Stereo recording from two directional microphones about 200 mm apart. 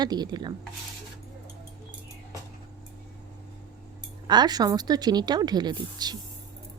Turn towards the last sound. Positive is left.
turn(degrees=-20)  # may be behind; listen again after turning